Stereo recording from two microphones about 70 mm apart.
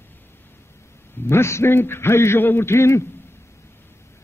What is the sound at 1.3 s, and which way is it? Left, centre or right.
A man's voice, left.